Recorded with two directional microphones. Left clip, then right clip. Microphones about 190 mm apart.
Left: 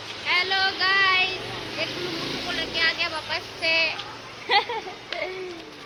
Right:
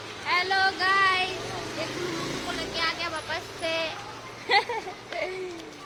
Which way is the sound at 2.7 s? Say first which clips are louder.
Left 5 dB; 20° right (ahead or behind).